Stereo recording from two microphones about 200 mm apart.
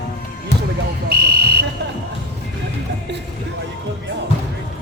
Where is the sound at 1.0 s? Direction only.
50° right (ahead or behind).